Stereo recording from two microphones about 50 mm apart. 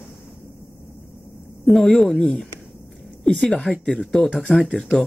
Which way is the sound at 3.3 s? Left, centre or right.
Centre.